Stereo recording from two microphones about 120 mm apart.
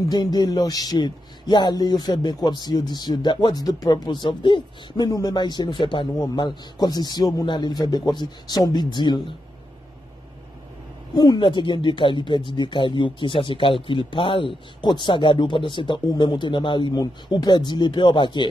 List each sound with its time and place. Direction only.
0.1 s speech: 35° left (ahead or behind)
11.1 s speech: 40° left (ahead or behind)